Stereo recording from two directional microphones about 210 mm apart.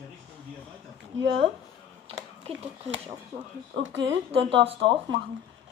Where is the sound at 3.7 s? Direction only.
60° right (ahead or behind).